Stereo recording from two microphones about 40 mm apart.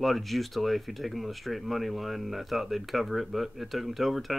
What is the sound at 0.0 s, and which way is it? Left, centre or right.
Speech, centre.